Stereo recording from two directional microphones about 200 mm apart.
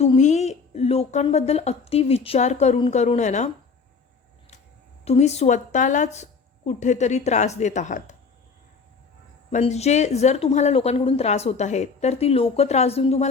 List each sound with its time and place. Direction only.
0.0 s a woman's voice: 35° left (ahead or behind)
5.0 s a woman's voice: 35° left (ahead or behind)
9.5 s a woman's voice: 35° left (ahead or behind)